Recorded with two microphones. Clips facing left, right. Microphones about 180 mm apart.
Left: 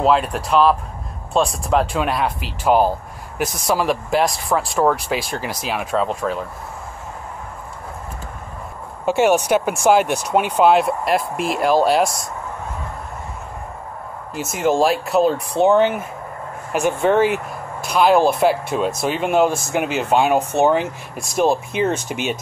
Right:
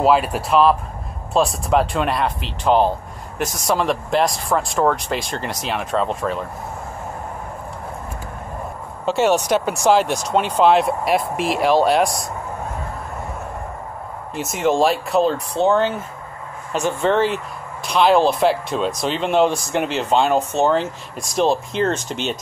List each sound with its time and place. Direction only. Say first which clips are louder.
0.0 s speech: right 1 dB; 5° right (ahead or behind)
9.0 s speech: left 2 dB; 10° left (ahead or behind)
10.0 s speech: left 1 dB; 60° left (ahead or behind)
10.6 s speech: even; centre (ahead or behind)
14.3 s speech: even; centre (ahead or behind)